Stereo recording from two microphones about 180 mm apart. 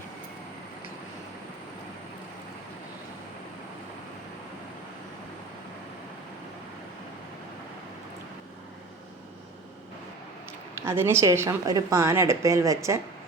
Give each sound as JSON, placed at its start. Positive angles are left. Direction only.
{"t": 10.8, "sound": "speech", "side_deg": -15}